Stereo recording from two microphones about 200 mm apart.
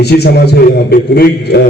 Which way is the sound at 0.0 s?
55° left (ahead or behind).